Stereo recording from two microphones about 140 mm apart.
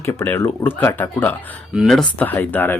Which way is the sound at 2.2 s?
15° left (ahead or behind).